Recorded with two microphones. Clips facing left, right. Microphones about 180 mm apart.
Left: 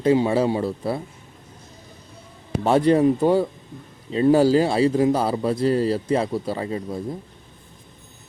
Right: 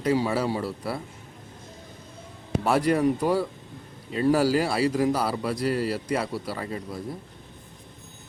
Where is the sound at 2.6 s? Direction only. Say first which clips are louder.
Left 5 dB; 25° left (ahead or behind).